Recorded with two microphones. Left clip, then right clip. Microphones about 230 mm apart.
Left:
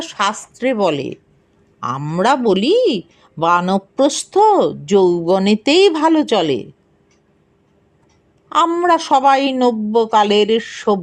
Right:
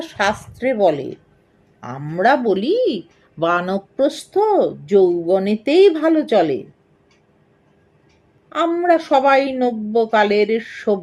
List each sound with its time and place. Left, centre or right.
0.0 s speech: left
8.4 s speech: left